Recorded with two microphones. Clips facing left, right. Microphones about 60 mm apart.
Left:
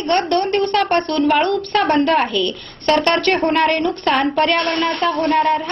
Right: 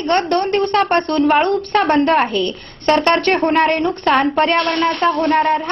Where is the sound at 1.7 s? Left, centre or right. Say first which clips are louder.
Right 1 dB; right.